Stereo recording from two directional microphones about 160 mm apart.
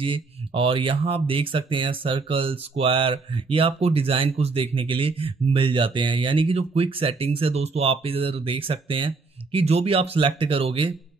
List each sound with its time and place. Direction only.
0.0 s speech: 35° right (ahead or behind)